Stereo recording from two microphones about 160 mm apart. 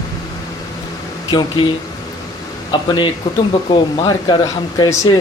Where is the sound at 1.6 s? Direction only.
35° left (ahead or behind).